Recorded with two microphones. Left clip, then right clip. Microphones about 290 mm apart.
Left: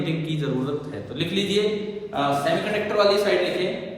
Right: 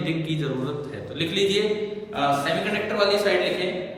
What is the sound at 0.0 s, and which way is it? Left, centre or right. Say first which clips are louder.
A man's voice: even; centre.